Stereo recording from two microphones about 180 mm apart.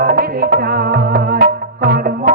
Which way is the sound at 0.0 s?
55° right (ahead or behind).